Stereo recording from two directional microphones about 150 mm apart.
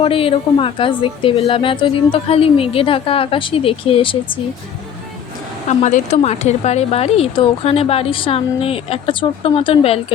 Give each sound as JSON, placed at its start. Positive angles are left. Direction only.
{"t": 0.0, "sound": "speech", "side_deg": 40}
{"t": 5.6, "sound": "speech", "side_deg": 50}